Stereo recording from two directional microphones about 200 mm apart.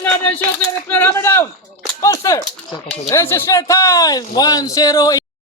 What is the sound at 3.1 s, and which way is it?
A man's voice, 15° left (ahead or behind).